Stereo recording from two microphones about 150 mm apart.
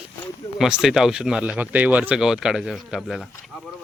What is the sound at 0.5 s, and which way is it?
Speech, 5° right (ahead or behind).